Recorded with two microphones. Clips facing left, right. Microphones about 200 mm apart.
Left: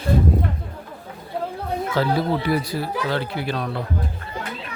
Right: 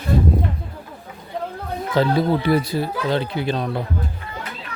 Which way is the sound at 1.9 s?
20° right (ahead or behind).